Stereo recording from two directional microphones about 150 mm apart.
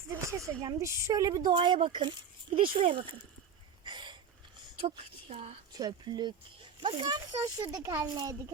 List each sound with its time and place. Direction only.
0.1 s speech: 20° right (ahead or behind)
3.8 s a sound: 30° right (ahead or behind)
4.9 s speech: 45° right (ahead or behind)
5.7 s speech: 25° right (ahead or behind)